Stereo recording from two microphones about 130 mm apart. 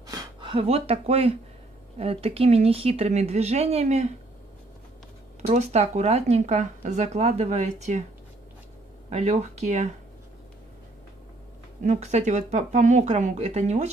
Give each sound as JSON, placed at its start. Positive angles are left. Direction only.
{"t": 0.0, "sound": "a sound", "side_deg": -30}
{"t": 0.5, "sound": "speech", "side_deg": -50}
{"t": 5.4, "sound": "speech", "side_deg": -60}
{"t": 9.1, "sound": "speech", "side_deg": -60}
{"t": 11.8, "sound": "speech", "side_deg": -65}